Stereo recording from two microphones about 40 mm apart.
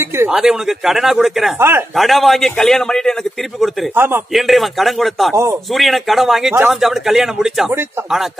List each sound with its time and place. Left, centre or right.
0.3 s speech: centre
1.6 s speech: right
2.0 s a man's voice: centre
3.9 s a man's voice: right
4.3 s a man's voice: centre